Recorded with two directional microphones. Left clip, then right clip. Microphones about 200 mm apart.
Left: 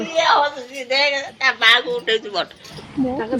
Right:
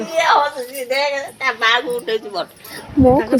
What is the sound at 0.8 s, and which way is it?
Speech, 60° right (ahead or behind).